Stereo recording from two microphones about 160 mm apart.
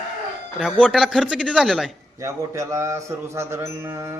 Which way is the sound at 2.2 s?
20° right (ahead or behind).